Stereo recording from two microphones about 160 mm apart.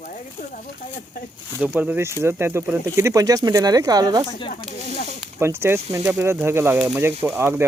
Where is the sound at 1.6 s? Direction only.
10° right (ahead or behind).